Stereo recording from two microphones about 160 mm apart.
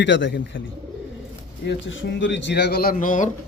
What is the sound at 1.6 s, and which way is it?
Speech, 90° left.